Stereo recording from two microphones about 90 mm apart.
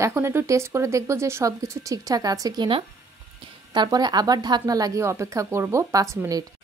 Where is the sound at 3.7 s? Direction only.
55° right (ahead or behind); by 6.2 s 35° right (ahead or behind).